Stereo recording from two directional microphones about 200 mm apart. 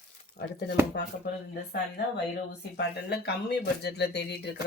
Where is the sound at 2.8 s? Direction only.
55° left (ahead or behind).